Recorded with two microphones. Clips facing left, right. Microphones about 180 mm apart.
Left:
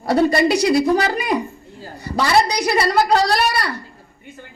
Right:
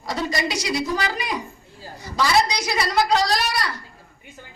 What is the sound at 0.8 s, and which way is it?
Speech, 40° left (ahead or behind).